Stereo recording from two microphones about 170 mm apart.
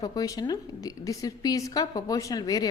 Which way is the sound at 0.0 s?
20° left (ahead or behind).